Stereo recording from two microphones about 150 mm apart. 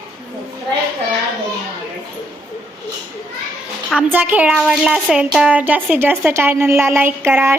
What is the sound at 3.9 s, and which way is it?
A woman's voice, 10° right (ahead or behind).